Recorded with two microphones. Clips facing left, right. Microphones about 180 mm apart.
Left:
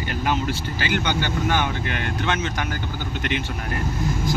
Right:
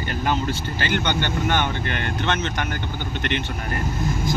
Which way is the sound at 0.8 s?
5° left (ahead or behind).